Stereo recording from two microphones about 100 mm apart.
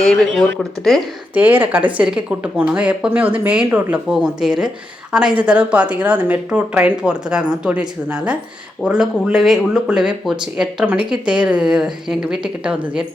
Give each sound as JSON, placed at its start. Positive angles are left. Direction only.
{"t": 0.0, "sound": "speech", "side_deg": 5}
{"t": 1.3, "sound": "speech", "side_deg": -15}
{"t": 4.1, "sound": "speech", "side_deg": -5}